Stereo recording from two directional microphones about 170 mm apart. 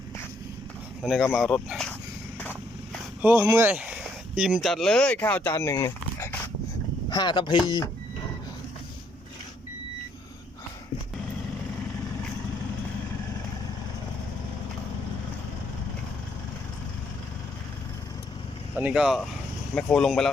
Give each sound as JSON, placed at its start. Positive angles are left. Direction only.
{"t": 1.3, "sound": "speech", "side_deg": 0}
{"t": 3.2, "sound": "speech", "side_deg": -10}
{"t": 18.8, "sound": "speech", "side_deg": -5}